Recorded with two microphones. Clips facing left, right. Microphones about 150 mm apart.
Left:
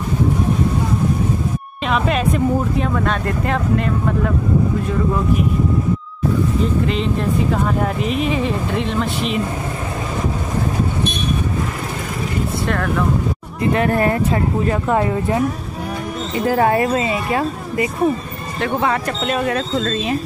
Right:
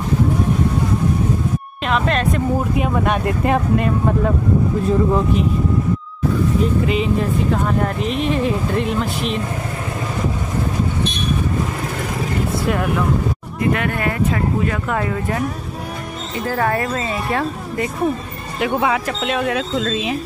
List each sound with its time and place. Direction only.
1.9 s speech: 5° left (ahead or behind)
2.8 s speech: 15° right (ahead or behind)
6.9 s speech: 5° right (ahead or behind)
12.6 s speech: 15° right (ahead or behind)
13.6 s speech: 35° left (ahead or behind)
16.5 s speech: 25° left (ahead or behind)
17.0 s speech: centre (ahead or behind)